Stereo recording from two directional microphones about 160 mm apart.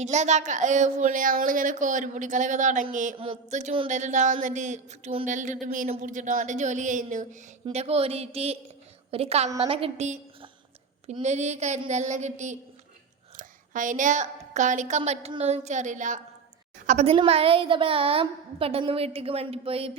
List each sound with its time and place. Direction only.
0.0 s a woman's voice: 45° right (ahead or behind)